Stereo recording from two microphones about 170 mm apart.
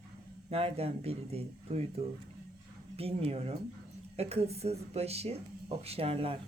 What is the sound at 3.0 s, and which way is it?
A woman's voice, 35° right (ahead or behind).